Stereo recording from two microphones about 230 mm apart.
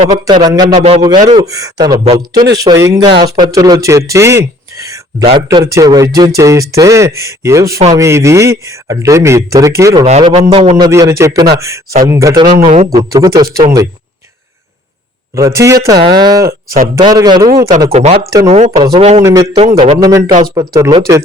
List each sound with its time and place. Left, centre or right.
0.0 s speech: right
0.4 s speech: centre
0.7 s speech: right; by 10.1 s centre
10.1 s speech: right
12.6 s speech: right
12.9 s speech: centre
15.4 s speech: centre
16.6 s speech: right
16.9 s speech: centre
19.2 s speech: centre